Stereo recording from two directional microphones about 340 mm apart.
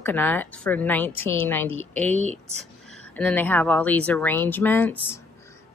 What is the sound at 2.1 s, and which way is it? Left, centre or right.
Speech, centre.